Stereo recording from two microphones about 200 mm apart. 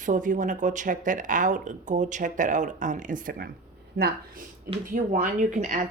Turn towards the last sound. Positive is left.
turn(degrees=-40)  # may be behind; listen again after turning